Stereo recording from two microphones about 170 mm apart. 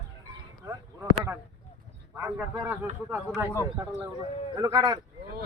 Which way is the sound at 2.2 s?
10° right (ahead or behind).